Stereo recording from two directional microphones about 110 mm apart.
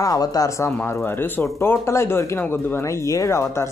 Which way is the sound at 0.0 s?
35° left (ahead or behind).